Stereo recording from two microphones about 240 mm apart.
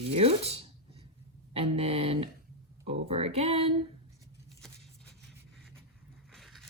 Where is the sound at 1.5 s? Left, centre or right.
Right.